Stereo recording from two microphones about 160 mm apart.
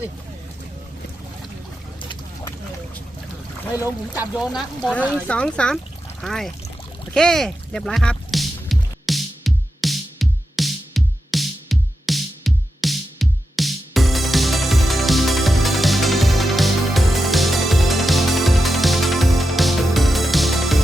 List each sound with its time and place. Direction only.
2.0 s a sound: 30° left (ahead or behind)
4.1 s speech: 10° right (ahead or behind)
4.5 s speech: 5° left (ahead or behind)
7.1 s music: 5° left (ahead or behind)